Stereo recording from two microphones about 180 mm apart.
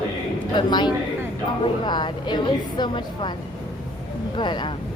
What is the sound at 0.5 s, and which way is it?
A woman's voice, 25° left (ahead or behind).